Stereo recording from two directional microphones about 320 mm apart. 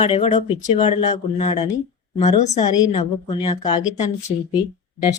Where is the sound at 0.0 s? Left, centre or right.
Centre.